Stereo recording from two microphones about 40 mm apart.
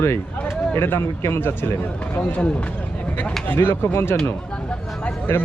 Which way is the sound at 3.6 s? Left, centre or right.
Left.